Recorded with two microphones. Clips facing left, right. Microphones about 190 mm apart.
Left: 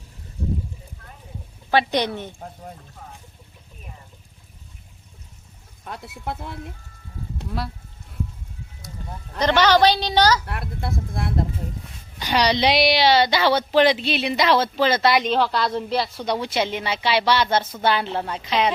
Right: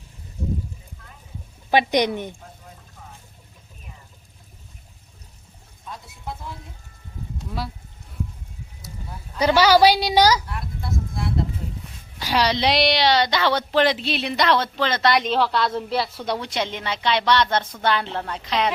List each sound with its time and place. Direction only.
1.7 s a woman's voice: 15° right (ahead or behind)
2.4 s boat: 45° left (ahead or behind)
5.8 s speech: 65° left (ahead or behind)
9.4 s a woman's voice: 10° right (ahead or behind)
10.4 s speech: 65° left (ahead or behind)
12.2 s a woman's voice: centre (ahead or behind)